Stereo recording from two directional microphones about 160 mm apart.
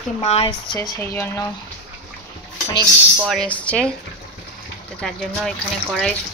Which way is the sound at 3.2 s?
Centre (ahead or behind).